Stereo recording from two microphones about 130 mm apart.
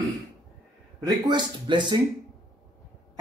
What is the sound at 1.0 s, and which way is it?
Speech, 35° right (ahead or behind).